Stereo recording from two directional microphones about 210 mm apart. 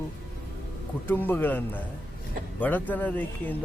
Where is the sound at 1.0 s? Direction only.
10° left (ahead or behind).